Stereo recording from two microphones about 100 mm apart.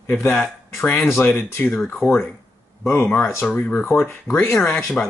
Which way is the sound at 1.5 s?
20° left (ahead or behind).